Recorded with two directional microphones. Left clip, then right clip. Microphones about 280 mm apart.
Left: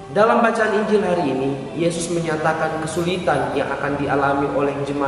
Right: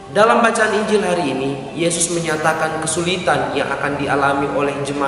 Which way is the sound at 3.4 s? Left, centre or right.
Centre.